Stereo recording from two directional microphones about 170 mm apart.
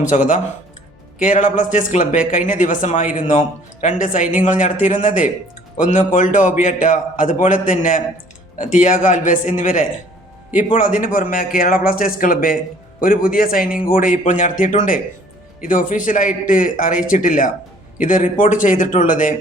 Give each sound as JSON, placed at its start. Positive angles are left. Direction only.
{"t": 0.0, "sound": "a man's voice", "side_deg": 45}